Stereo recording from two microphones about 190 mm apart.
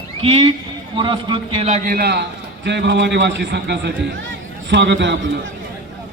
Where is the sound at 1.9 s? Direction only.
55° right (ahead or behind).